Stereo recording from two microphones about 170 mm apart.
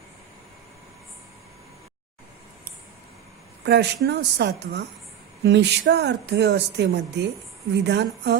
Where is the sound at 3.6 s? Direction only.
80° right.